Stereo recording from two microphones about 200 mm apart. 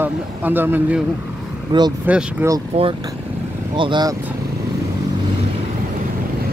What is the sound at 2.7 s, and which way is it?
Speech, 30° right (ahead or behind).